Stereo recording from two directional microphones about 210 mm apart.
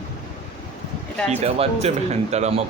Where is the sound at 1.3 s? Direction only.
30° right (ahead or behind).